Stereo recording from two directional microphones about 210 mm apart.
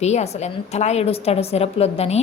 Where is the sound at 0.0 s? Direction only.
30° left (ahead or behind).